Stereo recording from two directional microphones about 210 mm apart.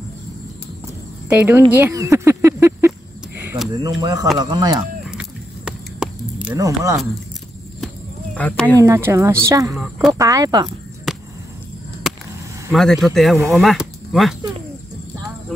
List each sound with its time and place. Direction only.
1.3 s speech: 10° right (ahead or behind)
4.0 s speech: 20° right (ahead or behind)
5.7 s a sound: 5° right (ahead or behind)
6.5 s speech: 15° right (ahead or behind)
8.4 s speech: 5° left (ahead or behind)
8.7 s speech: 15° right (ahead or behind)
11.1 s a sound: centre (ahead or behind)
12.7 s speech: centre (ahead or behind)